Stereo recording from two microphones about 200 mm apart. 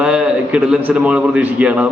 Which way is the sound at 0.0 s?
5° right (ahead or behind).